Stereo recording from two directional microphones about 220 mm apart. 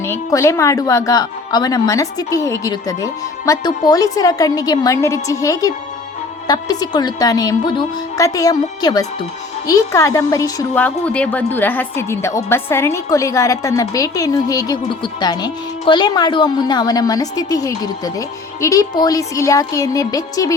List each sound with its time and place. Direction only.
0.0 s speech: 10° left (ahead or behind)